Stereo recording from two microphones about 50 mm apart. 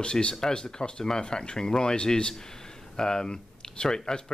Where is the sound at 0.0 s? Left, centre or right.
Centre.